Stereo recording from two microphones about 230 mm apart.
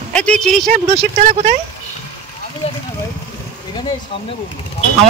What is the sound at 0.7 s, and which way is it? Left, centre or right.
Speech, right.